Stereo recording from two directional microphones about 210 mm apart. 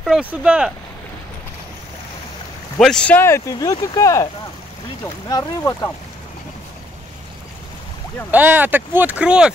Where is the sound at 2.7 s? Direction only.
5° left (ahead or behind).